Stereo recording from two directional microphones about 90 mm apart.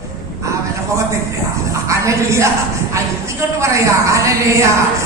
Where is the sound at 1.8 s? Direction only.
35° right (ahead or behind).